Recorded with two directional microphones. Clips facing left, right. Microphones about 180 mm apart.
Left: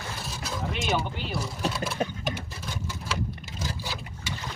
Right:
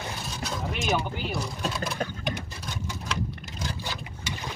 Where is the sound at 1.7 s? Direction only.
5° left (ahead or behind).